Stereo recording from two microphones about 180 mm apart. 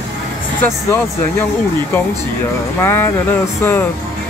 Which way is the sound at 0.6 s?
10° left (ahead or behind).